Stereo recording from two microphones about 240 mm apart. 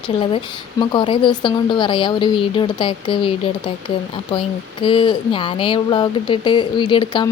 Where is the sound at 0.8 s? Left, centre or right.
Left.